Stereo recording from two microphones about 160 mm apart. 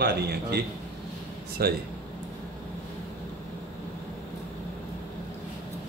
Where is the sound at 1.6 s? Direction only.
75° right (ahead or behind).